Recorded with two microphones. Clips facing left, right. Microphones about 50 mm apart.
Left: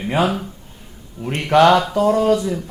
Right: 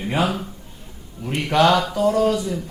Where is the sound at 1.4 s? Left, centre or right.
Left.